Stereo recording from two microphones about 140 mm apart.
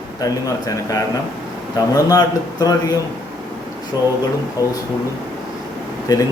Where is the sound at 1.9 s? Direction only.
25° left (ahead or behind).